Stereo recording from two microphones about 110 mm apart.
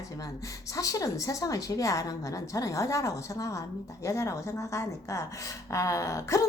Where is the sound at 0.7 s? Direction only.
30° left (ahead or behind).